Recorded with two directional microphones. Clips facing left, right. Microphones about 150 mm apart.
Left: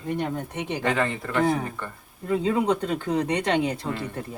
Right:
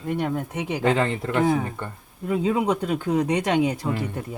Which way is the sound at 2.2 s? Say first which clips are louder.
Right 1 dB; 10° right (ahead or behind).